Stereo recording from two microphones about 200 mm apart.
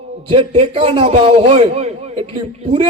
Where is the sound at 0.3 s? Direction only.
30° right (ahead or behind).